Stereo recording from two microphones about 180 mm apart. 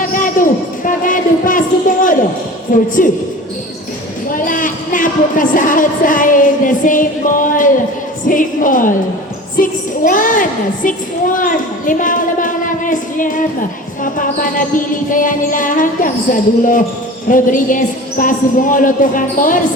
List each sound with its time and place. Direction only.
0.0 s a sound: 50° left (ahead or behind)
2.7 s music: 50° left (ahead or behind)
4.3 s speech: 45° left (ahead or behind)
8.3 s music: 45° left (ahead or behind)
11.3 s speech: 45° left (ahead or behind)
14.0 s music: 50° left (ahead or behind)